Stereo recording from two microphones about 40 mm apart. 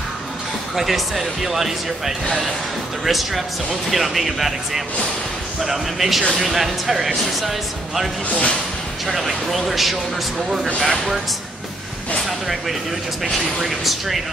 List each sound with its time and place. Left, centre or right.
0.7 s speech: centre
8.3 s speech: left
9.0 s speech: centre
12.3 s speech: centre